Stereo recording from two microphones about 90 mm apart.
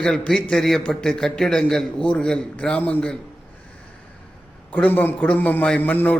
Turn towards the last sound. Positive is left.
turn(degrees=20)  # may be behind; listen again after turning